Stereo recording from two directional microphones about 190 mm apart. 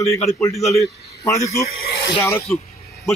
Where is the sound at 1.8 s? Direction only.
65° left (ahead or behind).